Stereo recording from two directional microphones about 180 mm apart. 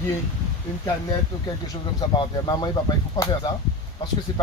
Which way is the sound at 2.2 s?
25° left (ahead or behind).